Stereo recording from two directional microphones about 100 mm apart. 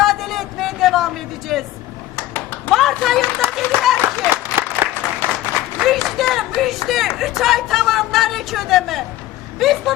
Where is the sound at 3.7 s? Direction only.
25° right (ahead or behind).